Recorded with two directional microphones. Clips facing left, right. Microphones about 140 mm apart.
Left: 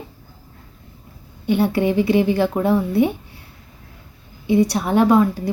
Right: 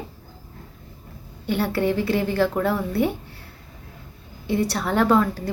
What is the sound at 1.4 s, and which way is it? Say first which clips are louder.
Speech: left 4 dB; 15° left (ahead or behind).